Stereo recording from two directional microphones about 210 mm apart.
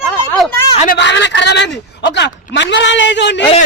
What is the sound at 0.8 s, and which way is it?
Speech, 55° left (ahead or behind).